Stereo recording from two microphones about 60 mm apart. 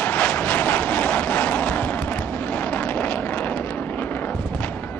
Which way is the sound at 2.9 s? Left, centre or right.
Left.